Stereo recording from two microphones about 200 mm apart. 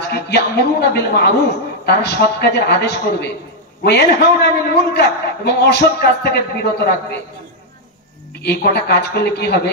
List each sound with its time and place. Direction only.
0.1 s a man's voice: 55° left (ahead or behind)
8.4 s a man's voice: 55° left (ahead or behind)